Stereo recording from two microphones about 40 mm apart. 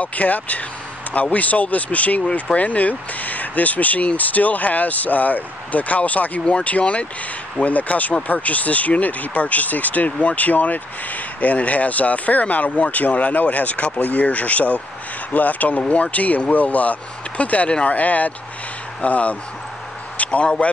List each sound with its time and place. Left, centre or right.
0.0 s speech: left